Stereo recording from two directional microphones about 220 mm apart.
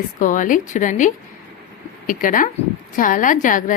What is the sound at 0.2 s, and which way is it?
A woman's voice, 35° left (ahead or behind).